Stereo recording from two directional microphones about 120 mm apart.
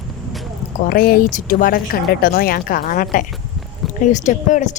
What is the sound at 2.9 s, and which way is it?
Speech, 90° left.